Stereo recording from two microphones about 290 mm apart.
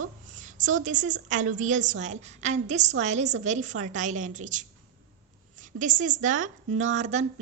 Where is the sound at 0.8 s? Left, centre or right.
Right.